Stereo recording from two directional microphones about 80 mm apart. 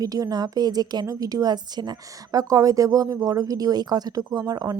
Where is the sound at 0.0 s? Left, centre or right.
Right.